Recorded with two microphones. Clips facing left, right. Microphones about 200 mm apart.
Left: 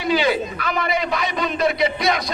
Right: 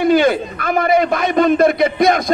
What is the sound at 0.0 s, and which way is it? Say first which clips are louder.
A man's voice: right 6 dB; 50° right (ahead or behind).